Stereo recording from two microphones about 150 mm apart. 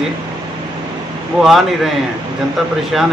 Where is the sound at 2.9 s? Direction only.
Centre (ahead or behind).